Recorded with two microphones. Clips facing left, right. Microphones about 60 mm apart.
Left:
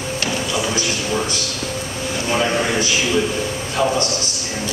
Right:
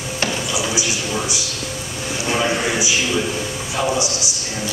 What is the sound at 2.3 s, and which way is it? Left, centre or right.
A man's voice, centre.